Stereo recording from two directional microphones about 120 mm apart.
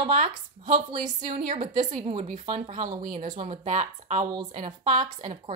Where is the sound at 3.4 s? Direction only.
65° right (ahead or behind).